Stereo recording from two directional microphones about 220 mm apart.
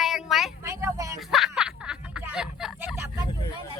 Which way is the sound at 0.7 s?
15° right (ahead or behind).